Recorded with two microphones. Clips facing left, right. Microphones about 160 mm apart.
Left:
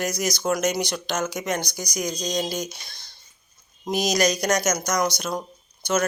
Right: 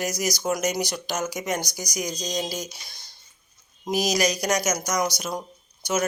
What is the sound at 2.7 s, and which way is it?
Speech, 10° right (ahead or behind).